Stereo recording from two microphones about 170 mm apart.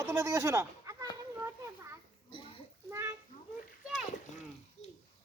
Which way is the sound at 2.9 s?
15° right (ahead or behind).